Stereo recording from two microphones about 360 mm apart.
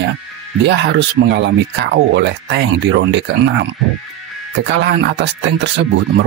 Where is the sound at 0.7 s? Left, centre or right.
Right.